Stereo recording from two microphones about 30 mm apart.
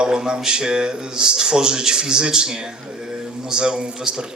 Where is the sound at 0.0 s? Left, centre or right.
Right.